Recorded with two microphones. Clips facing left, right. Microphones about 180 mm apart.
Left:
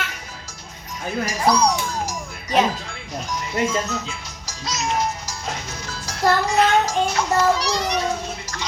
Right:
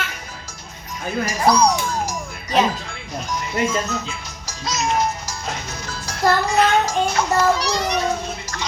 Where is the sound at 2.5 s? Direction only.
55° left (ahead or behind).